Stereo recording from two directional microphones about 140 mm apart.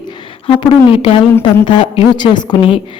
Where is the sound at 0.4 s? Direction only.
40° left (ahead or behind).